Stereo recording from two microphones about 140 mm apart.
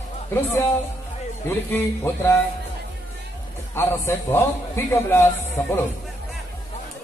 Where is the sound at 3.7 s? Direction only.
15° left (ahead or behind).